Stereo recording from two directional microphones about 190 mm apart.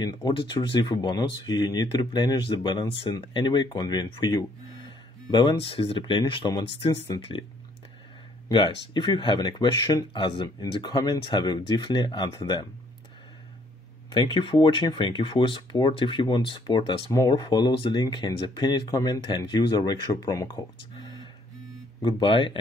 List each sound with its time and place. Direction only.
0.0 s speech: 25° left (ahead or behind)
8.5 s speech: 25° left (ahead or behind)
14.1 s speech: 25° left (ahead or behind)